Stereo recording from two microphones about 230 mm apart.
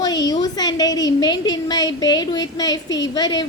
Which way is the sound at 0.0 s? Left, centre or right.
Centre.